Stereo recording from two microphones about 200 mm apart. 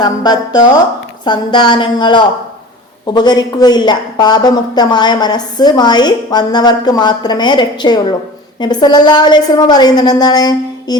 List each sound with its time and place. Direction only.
0.0 s a woman's voice: 20° left (ahead or behind)